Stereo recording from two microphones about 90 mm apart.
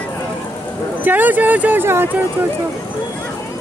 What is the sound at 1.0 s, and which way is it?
Speech, 20° right (ahead or behind).